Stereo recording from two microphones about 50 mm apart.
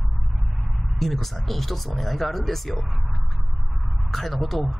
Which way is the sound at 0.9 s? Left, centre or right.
Centre.